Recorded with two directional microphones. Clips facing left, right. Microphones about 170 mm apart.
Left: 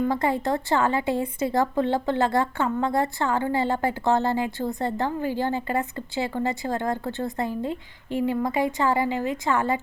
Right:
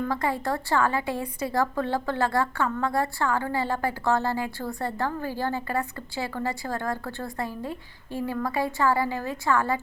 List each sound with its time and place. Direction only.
0.0 s a woman's voice: 25° left (ahead or behind)